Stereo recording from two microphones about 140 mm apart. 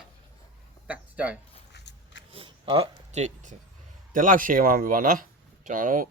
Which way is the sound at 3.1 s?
55° right (ahead or behind).